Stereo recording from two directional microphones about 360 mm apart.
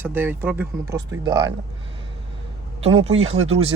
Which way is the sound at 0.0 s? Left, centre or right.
Centre.